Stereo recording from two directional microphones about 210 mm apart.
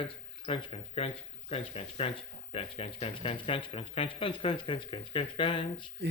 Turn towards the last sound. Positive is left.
turn(degrees=25)  # may be behind; listen again after turning